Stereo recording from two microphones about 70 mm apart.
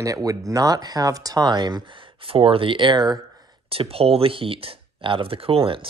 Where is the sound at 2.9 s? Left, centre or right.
Right.